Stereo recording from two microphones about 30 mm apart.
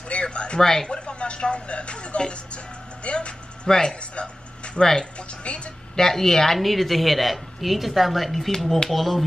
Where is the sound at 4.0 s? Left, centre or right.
Left.